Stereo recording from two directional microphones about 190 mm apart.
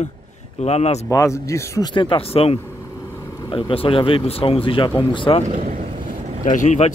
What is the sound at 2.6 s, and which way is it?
Vehicle, 15° left (ahead or behind).